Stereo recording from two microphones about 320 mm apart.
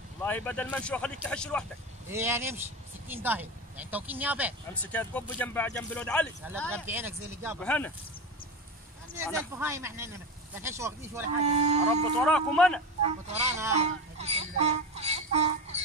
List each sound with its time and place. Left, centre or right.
0.2 s speech: centre
2.0 s speech: centre
7.6 s speech: centre
9.3 s speech: centre
11.4 s speech: centre
12.2 s speech: centre
13.0 s speech: centre
13.7 s music: centre